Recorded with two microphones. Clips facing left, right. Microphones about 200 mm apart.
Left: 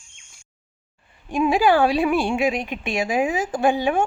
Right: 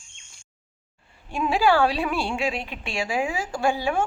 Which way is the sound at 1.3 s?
15° left (ahead or behind).